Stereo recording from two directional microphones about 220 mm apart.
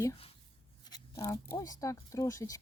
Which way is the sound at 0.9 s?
15° left (ahead or behind).